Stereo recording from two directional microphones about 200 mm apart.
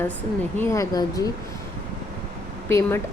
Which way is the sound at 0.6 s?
15° left (ahead or behind).